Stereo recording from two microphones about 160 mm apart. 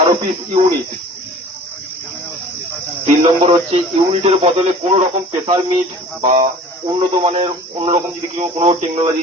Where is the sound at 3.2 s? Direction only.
35° right (ahead or behind).